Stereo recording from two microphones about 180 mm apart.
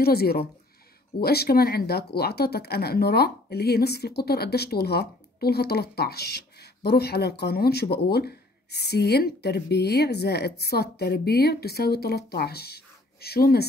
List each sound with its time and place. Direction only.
0.0 s speech: 60° left (ahead or behind)